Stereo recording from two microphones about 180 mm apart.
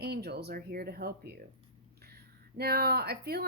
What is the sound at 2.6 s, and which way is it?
Speech, 60° right (ahead or behind).